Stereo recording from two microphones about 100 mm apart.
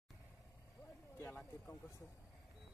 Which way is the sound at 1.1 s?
25° left (ahead or behind).